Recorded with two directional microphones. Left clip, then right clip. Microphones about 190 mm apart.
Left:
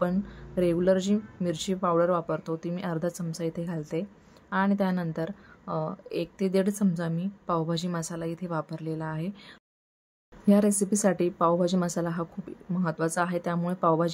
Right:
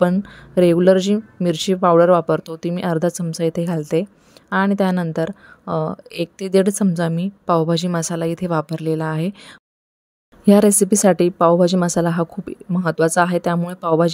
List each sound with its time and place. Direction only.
0.0 s speech: 45° right (ahead or behind)